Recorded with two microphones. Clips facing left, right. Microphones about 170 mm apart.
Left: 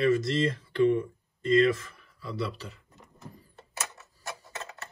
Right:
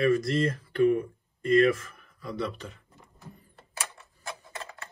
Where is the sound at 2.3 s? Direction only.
35° left (ahead or behind).